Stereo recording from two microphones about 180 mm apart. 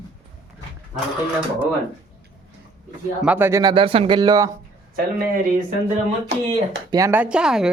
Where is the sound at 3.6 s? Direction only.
30° right (ahead or behind).